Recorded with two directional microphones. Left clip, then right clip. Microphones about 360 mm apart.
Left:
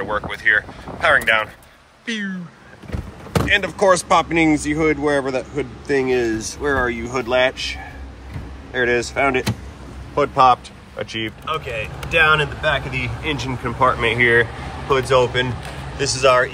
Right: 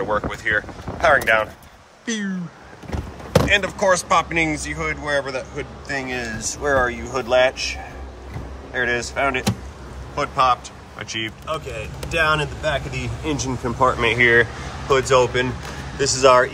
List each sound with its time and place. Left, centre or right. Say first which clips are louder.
0.0 s speech: left 2 dB; centre
3.4 s speech: left 4 dB; centre
8.7 s speech: left 3 dB; centre
13.0 s speech: left 2 dB; right
13.4 s speech: left 1 dB; centre